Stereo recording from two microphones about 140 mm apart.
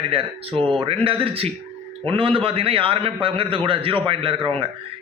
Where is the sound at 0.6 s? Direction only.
Centre (ahead or behind).